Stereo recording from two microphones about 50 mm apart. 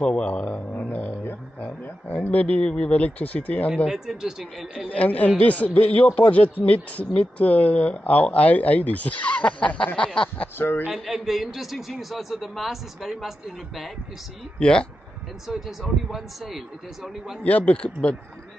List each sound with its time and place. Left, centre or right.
0.0 s speech: left
3.9 s speech: centre
4.9 s speech: left
9.9 s a sound: centre
10.6 s speech: left
10.9 s a man's voice: centre
14.6 s speech: left
15.4 s a man's voice: centre
17.4 s speech: left